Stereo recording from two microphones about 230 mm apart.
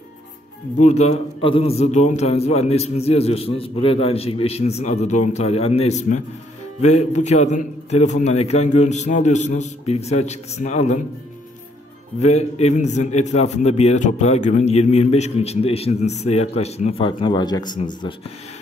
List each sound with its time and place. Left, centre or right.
0.7 s a man's voice: left
12.2 s a man's voice: left